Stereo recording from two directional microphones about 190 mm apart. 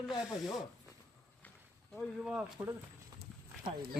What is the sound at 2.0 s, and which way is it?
Speech, 5° right (ahead or behind).